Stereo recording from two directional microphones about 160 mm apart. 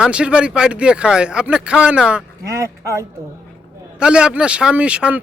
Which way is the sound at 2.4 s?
20° right (ahead or behind).